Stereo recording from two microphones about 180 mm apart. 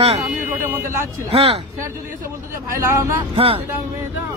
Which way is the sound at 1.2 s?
35° right (ahead or behind).